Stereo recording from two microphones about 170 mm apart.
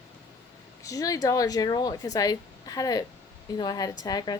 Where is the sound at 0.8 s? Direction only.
20° left (ahead or behind).